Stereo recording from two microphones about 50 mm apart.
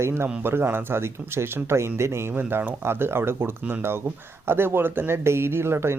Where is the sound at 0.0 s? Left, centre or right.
Right.